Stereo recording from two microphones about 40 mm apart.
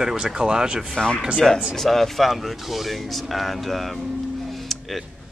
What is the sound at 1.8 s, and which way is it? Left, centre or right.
Speech, centre.